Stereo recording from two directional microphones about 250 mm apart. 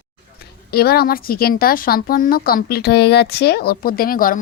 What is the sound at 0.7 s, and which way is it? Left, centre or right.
Speech, left.